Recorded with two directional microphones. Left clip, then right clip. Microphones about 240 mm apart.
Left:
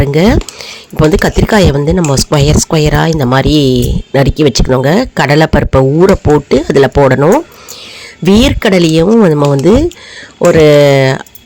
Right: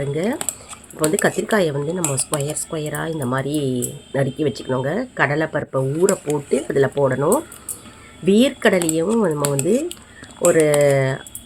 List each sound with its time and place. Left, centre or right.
0.0 s speech: left